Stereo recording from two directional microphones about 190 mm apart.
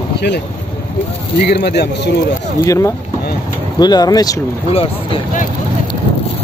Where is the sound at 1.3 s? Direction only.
60° left (ahead or behind).